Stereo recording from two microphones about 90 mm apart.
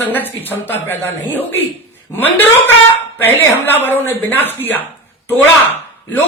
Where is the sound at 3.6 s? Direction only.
25° left (ahead or behind).